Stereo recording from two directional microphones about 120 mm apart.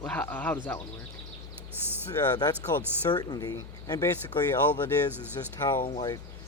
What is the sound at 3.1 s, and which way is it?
Speech, 35° left (ahead or behind).